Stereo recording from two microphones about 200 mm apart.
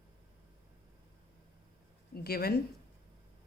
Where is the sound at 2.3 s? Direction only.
50° left (ahead or behind).